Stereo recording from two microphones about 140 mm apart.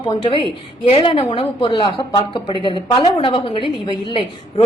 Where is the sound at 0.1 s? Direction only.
35° left (ahead or behind).